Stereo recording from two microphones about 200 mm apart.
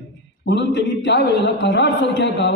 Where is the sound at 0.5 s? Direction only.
60° left (ahead or behind).